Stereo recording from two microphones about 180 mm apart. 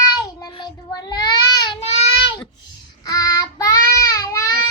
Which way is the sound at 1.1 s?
25° left (ahead or behind).